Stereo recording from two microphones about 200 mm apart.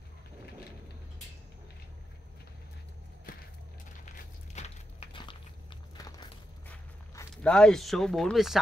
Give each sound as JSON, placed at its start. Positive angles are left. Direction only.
{"t": 4.6, "sound": "biting", "side_deg": 30}
{"t": 6.7, "sound": "zipper", "side_deg": 5}